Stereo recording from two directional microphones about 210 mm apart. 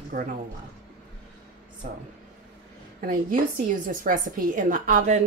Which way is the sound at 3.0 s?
40° right (ahead or behind).